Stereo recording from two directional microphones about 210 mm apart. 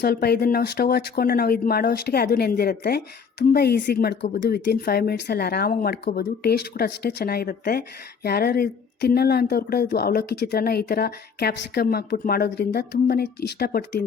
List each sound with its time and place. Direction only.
0.0 s speech: 50° left (ahead or behind)